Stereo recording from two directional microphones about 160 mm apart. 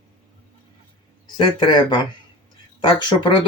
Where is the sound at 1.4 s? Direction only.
30° left (ahead or behind).